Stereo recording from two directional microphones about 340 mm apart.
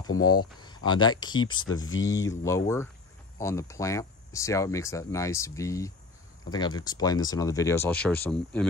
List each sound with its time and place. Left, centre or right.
0.2 s speech: centre
1.7 s speech: left
2.4 s speech: centre